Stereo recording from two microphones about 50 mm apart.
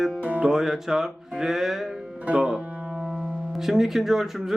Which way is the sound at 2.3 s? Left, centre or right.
Right.